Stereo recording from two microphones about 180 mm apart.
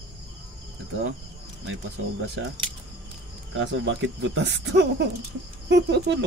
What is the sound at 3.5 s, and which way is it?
Speech, 90° right.